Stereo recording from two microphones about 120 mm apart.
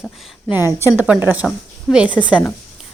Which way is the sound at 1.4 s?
5° right (ahead or behind).